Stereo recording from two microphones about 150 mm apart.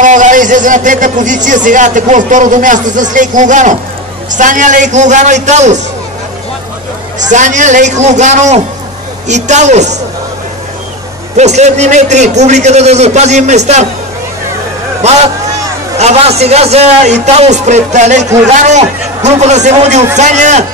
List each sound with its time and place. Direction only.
0.0 s a man's voice: 55° right (ahead or behind)
7.2 s a man's voice: 55° right (ahead or behind)
11.3 s a man's voice: 50° right (ahead or behind)
16.0 s a man's voice: 45° right (ahead or behind)